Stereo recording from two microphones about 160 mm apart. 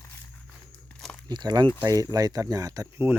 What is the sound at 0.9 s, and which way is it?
Crumpling, 5° left (ahead or behind).